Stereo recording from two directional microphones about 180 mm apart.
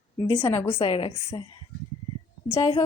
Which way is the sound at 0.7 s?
30° left (ahead or behind).